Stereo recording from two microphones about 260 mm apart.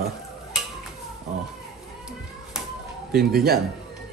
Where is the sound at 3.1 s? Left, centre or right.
Right.